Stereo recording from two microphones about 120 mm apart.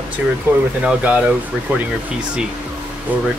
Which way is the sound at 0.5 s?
15° right (ahead or behind).